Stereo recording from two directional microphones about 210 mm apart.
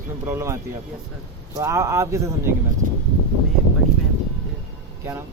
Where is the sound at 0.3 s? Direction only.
10° right (ahead or behind).